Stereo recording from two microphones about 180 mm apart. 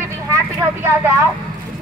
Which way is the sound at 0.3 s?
10° right (ahead or behind).